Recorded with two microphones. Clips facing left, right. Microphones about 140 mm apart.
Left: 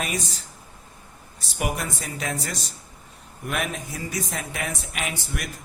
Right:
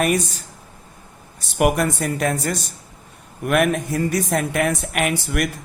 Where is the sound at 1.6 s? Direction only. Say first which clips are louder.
Right 10 dB; 60° right (ahead or behind).